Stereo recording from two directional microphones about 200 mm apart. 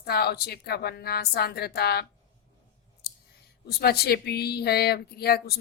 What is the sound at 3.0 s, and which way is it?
Clicking, 50° left (ahead or behind).